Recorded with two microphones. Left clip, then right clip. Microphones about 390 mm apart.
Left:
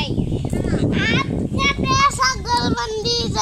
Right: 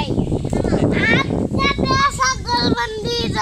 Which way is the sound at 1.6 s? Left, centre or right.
Centre.